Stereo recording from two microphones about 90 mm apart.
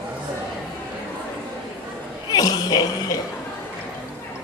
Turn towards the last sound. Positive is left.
turn(degrees=45)  # may be behind; listen again after turning